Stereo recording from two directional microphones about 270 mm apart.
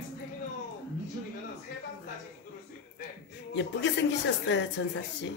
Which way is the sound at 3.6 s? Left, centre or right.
Left.